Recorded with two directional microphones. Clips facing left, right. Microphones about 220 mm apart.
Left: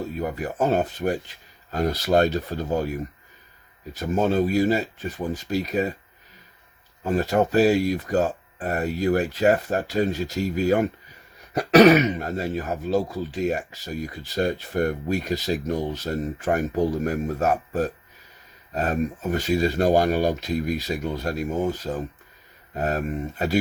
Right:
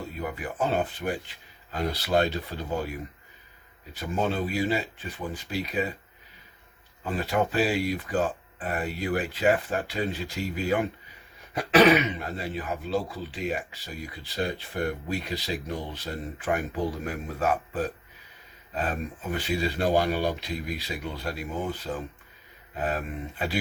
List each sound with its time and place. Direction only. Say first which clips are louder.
0.2 s speech: left 4 dB; 40° left (ahead or behind)
7.0 s speech: left 6 dB; 45° left (ahead or behind)